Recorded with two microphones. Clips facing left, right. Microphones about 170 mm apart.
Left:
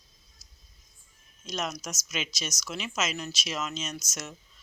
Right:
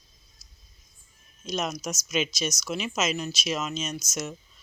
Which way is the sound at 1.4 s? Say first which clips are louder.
Right 4 dB; 15° right (ahead or behind).